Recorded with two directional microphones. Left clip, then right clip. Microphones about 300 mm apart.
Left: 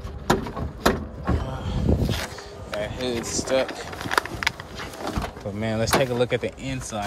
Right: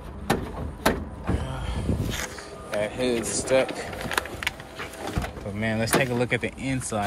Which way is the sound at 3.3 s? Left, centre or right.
Centre.